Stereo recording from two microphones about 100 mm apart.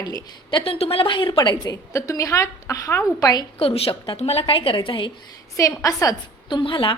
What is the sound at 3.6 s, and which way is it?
A woman's voice, 70° left (ahead or behind).